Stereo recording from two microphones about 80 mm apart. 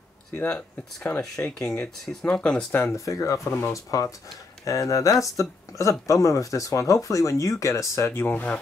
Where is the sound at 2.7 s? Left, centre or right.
Left.